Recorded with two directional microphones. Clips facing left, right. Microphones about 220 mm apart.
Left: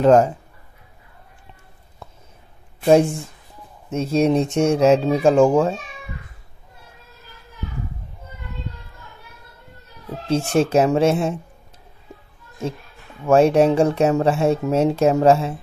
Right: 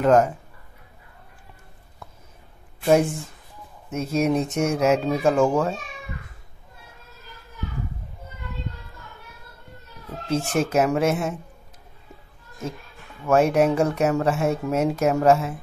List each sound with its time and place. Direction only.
0.0 s speech: 30° left (ahead or behind)
3.9 s speech: 30° left (ahead or behind)
10.2 s speech: 30° left (ahead or behind)
13.3 s speech: 30° left (ahead or behind)